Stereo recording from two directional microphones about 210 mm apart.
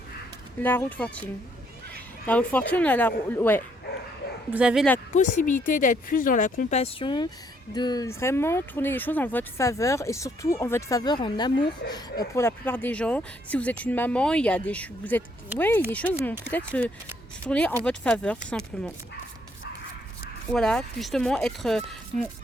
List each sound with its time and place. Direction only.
0.6 s speech: 10° left (ahead or behind)
4.5 s speech: 5° right (ahead or behind)
5.1 s speech: 35° left (ahead or behind); by 18.9 s 5° left (ahead or behind)
20.5 s speech: 5° left (ahead or behind)